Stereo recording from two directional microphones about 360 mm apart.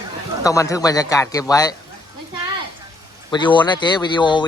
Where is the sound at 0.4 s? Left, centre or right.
Centre.